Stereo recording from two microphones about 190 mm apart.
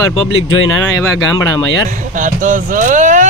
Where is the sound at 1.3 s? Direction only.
20° left (ahead or behind).